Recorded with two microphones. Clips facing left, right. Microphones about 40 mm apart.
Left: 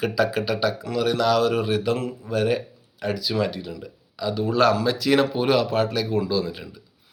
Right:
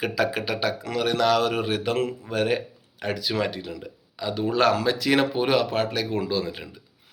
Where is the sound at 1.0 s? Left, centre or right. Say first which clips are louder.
Left 1 dB; right.